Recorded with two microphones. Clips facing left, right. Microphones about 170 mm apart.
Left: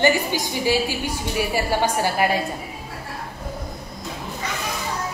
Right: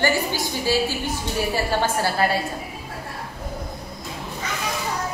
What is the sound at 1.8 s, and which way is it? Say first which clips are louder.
Speech: left 1 dB; 15° left (ahead or behind).